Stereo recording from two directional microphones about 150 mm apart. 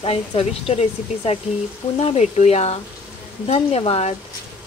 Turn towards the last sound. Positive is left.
turn(degrees=45)  # may be behind; listen again after turning